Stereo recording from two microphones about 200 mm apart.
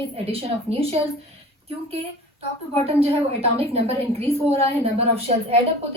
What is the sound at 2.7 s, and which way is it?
A woman's voice, 30° right (ahead or behind).